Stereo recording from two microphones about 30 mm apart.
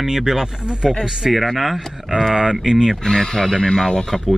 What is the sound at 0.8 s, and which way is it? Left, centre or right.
Speech, centre.